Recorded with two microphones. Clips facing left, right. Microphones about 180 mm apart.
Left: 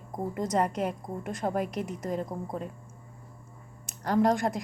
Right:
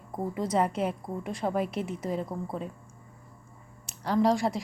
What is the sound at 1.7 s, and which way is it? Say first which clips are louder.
Speech: right 1 dB; 40° left (ahead or behind).